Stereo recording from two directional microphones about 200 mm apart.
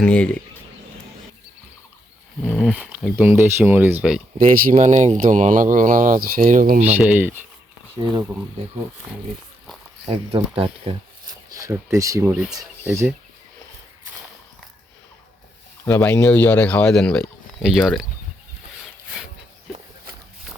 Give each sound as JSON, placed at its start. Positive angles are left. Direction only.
{"t": 0.0, "sound": "speech", "side_deg": 5}
{"t": 2.4, "sound": "speech", "side_deg": 0}
{"t": 4.6, "sound": "speech", "side_deg": -40}
{"t": 7.0, "sound": "speech", "side_deg": -10}
{"t": 10.1, "sound": "speech", "side_deg": -30}
{"t": 11.5, "sound": "speech", "side_deg": -15}
{"t": 12.3, "sound": "speech", "side_deg": -5}
{"t": 15.9, "sound": "speech", "side_deg": 10}